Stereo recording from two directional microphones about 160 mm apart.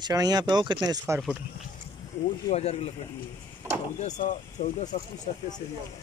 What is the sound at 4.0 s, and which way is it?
Speech, 50° left (ahead or behind).